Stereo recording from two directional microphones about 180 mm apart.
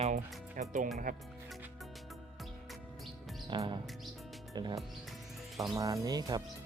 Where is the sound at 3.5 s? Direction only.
25° right (ahead or behind).